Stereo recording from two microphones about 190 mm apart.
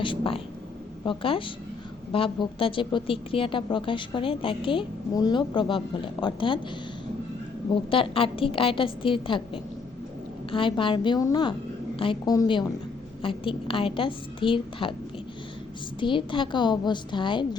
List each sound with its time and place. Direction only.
0.0 s speech: 25° left (ahead or behind)
7.7 s speech: 30° left (ahead or behind)
16.0 s speech: 25° left (ahead or behind)